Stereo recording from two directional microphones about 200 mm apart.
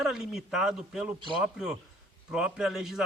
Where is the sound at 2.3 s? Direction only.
5° right (ahead or behind).